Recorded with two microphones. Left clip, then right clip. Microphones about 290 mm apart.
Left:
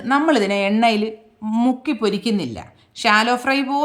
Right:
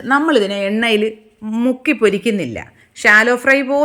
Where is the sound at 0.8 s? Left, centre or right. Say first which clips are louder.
Right 3 dB; left.